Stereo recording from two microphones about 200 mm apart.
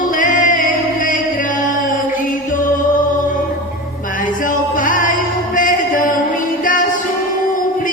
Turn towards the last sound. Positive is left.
turn(degrees=40)  # may be behind; listen again after turning